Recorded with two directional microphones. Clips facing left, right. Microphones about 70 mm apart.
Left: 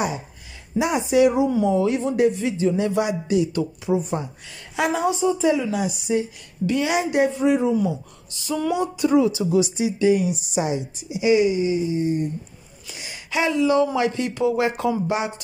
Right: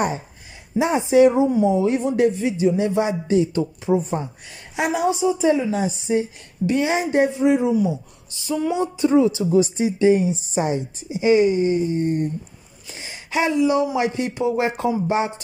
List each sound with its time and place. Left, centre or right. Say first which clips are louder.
0.7 s speech: right 3 dB; right
5.5 s a woman's voice: right 2 dB; right
7.4 s a woman's voice: right 1 dB; right
12.8 s speech: right 1 dB; right